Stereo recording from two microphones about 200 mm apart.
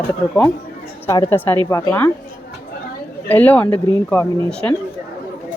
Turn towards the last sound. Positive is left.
turn(degrees=5)  # may be behind; listen again after turning